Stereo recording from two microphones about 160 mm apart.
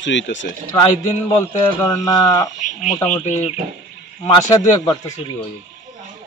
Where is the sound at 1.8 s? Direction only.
20° left (ahead or behind).